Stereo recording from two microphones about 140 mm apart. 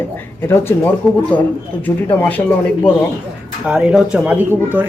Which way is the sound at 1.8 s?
10° left (ahead or behind).